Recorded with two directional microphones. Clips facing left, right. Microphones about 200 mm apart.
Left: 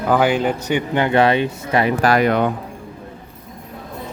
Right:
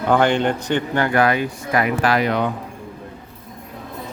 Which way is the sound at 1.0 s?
25° left (ahead or behind).